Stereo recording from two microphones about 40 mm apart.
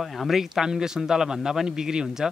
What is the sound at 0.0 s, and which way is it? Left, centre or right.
Speech, centre.